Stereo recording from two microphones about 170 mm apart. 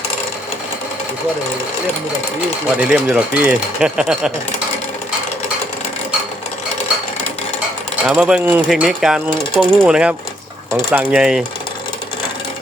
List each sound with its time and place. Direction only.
2.9 s speech: 5° right (ahead or behind)
8.0 s speech: 5° right (ahead or behind)